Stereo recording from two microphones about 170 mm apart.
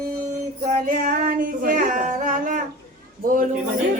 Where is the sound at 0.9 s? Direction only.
50° right (ahead or behind).